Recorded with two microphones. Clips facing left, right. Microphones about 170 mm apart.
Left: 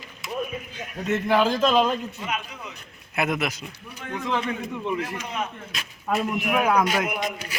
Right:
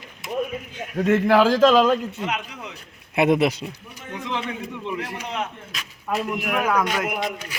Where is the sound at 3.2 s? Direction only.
30° right (ahead or behind).